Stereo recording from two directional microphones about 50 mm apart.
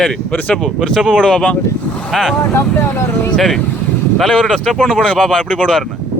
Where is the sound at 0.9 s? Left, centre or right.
Centre.